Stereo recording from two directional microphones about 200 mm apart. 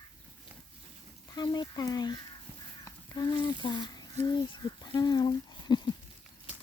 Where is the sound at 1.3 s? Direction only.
20° left (ahead or behind).